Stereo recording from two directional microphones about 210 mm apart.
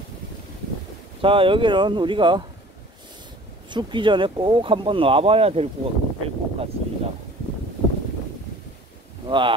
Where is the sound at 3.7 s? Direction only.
20° right (ahead or behind).